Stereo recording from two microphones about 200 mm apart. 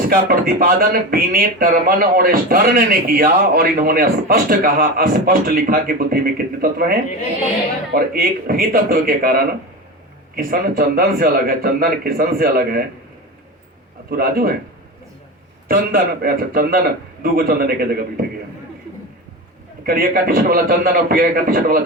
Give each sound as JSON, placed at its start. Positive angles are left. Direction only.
{"t": 0.1, "sound": "speech", "side_deg": -50}
{"t": 10.3, "sound": "speech", "side_deg": -45}
{"t": 14.1, "sound": "speech", "side_deg": -45}
{"t": 15.7, "sound": "speech", "side_deg": -45}
{"t": 19.8, "sound": "speech", "side_deg": -45}